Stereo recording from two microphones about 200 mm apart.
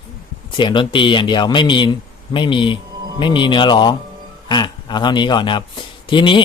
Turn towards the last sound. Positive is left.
turn(degrees=25)  # may be behind; listen again after turning